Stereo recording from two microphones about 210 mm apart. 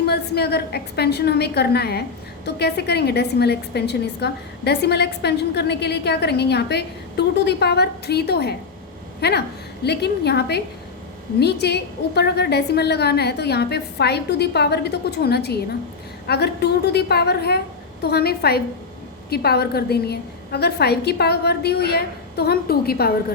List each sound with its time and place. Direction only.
0.0 s a woman's voice: 50° left (ahead or behind)